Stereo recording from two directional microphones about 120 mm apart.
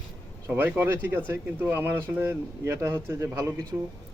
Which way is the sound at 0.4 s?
20° right (ahead or behind).